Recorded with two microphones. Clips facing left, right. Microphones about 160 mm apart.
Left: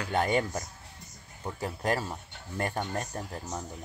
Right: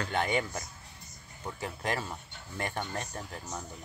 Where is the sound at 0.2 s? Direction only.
40° left (ahead or behind).